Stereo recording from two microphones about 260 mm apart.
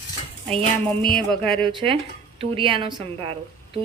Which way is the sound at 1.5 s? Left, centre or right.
Centre.